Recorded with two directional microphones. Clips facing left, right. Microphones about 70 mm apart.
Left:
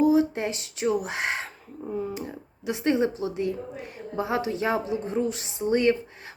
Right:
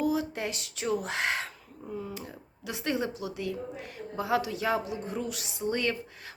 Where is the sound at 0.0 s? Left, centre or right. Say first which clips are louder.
Left 8 dB; left.